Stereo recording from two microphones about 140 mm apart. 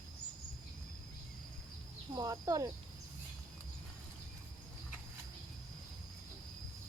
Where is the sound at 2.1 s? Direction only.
25° right (ahead or behind).